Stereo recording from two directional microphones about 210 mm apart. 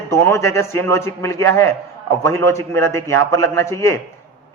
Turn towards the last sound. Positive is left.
turn(degrees=15)  # may be behind; listen again after turning